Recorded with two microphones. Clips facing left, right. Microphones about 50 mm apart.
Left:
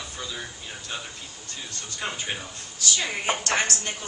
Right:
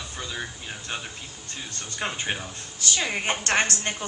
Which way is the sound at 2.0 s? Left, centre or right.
Right.